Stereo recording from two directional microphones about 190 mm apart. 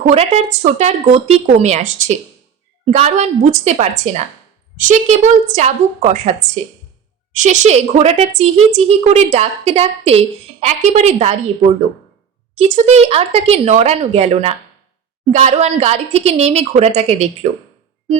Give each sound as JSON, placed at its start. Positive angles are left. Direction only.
{"t": 0.0, "sound": "a woman's voice", "side_deg": -35}
{"t": 12.5, "sound": "a woman's voice", "side_deg": -35}